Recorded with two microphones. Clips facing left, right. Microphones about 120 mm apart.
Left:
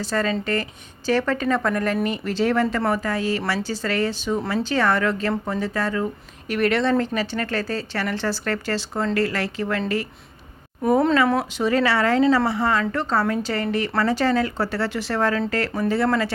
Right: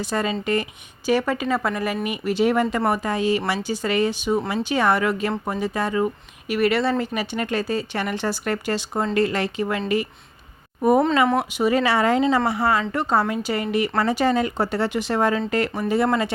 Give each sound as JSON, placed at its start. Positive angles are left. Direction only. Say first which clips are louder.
{"t": 0.0, "sound": "speech", "louder": "left 1 dB", "side_deg": -15}
{"t": 6.5, "sound": "speech", "louder": "even", "side_deg": -5}
{"t": 11.3, "sound": "speech", "louder": "right 1 dB", "side_deg": -15}